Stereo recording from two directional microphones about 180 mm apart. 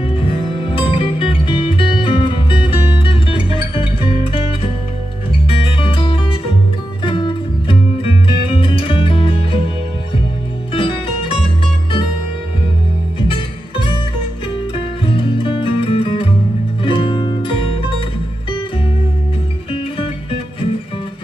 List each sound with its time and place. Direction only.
0.0 s music: 30° left (ahead or behind)
10.7 s music: 30° left (ahead or behind)
13.3 s music: 30° left (ahead or behind)
15.0 s music: 30° left (ahead or behind)
19.7 s music: 30° left (ahead or behind)